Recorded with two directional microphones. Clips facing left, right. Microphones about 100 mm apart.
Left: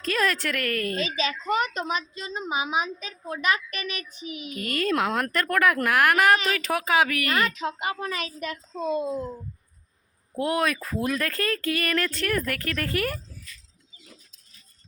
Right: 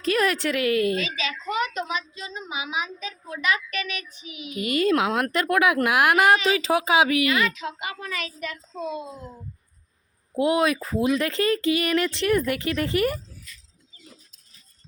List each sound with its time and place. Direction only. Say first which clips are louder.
0.1 s speech: right 3 dB; 10° right (ahead or behind)
0.9 s a child's voice: left 1 dB; 40° left (ahead or behind)
4.5 s speech: right 4 dB; 10° right (ahead or behind)
6.1 s speech: right 2 dB; 25° right (ahead or behind)
7.3 s a child's voice: right 1 dB; 40° left (ahead or behind)
10.3 s speech: right 4 dB; 5° right (ahead or behind)